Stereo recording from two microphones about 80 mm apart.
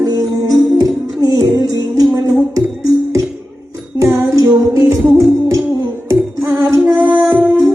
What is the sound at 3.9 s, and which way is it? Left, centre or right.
Music, right.